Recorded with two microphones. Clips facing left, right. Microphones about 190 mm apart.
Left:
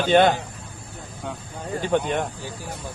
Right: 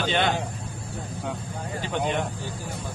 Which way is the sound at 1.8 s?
50° left (ahead or behind).